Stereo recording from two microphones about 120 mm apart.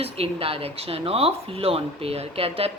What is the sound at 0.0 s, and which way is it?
Speech, 50° right (ahead or behind).